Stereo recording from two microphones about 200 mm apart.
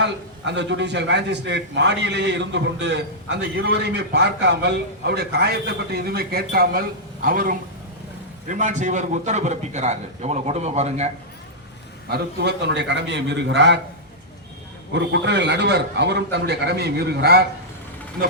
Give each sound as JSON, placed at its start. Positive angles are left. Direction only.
{"t": 0.0, "sound": "a man's voice", "side_deg": -60}
{"t": 12.1, "sound": "a man's voice", "side_deg": -55}
{"t": 14.9, "sound": "a man's voice", "side_deg": -60}